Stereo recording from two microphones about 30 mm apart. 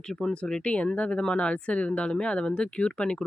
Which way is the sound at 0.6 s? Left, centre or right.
Left.